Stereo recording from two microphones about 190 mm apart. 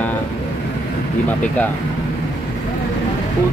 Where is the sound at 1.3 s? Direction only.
10° left (ahead or behind).